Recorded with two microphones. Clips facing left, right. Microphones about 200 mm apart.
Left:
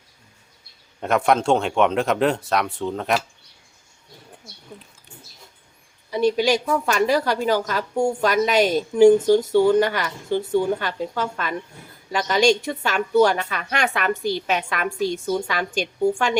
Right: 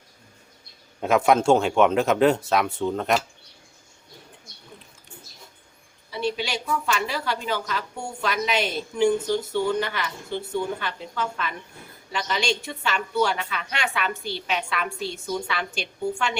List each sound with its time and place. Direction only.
1.0 s speech: centre (ahead or behind)
6.1 s a woman's voice: 45° left (ahead or behind)